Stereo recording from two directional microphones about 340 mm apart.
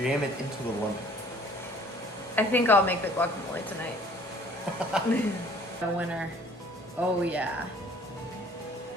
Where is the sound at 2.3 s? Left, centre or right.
Centre.